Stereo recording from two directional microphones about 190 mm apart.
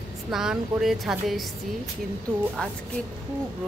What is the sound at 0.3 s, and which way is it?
A woman's voice, centre (ahead or behind).